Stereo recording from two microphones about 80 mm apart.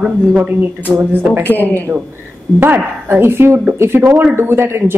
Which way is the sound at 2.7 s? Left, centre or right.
Right.